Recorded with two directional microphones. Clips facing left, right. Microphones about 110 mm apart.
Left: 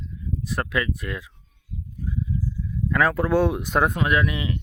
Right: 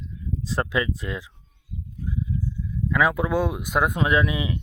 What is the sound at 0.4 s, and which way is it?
Speech, 25° right (ahead or behind).